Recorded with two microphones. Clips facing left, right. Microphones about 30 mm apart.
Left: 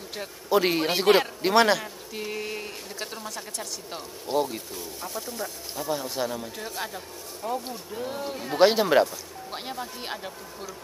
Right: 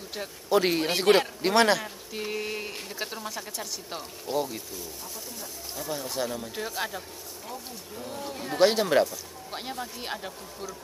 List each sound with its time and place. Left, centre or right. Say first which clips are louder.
0.1 s a man's voice: left 1 dB; centre
4.3 s speech: left 3 dB; centre
5.8 s speech: left 3 dB; centre
7.4 s speech: left 10 dB; left
8.5 s a man's voice: left 2 dB; centre